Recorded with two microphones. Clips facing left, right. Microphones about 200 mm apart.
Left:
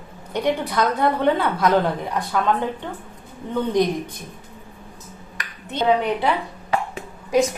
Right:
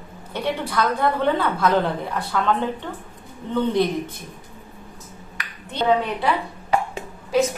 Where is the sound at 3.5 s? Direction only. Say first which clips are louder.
Even; 15° left (ahead or behind).